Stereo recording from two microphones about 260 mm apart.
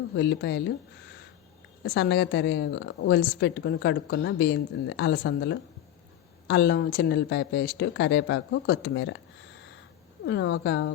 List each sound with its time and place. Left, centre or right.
0.2 s a woman's voice: left
1.8 s a woman's voice: left
10.2 s a woman's voice: left